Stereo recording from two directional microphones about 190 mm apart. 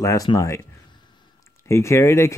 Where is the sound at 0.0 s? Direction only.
20° left (ahead or behind).